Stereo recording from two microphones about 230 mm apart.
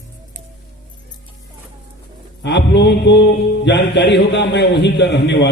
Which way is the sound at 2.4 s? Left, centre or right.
Left.